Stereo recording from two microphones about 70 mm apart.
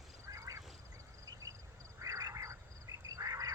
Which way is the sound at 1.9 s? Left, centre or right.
Right.